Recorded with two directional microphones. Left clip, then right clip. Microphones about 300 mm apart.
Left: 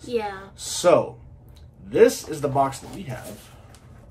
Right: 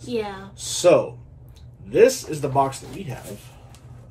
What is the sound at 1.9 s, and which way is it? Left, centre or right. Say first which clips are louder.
Speech: right 1 dB; centre.